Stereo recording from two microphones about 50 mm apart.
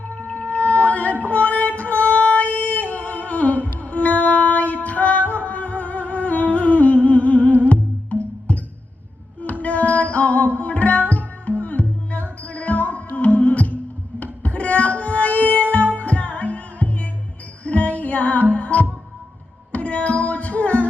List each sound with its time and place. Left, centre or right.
0.1 s whale vocalization: left
1.2 s music: left
5.3 s humming: left
9.4 s music: left